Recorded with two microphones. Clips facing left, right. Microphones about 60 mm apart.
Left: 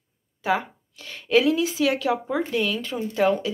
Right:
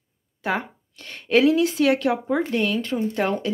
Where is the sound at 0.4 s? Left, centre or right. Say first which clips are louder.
Left 2 dB; right.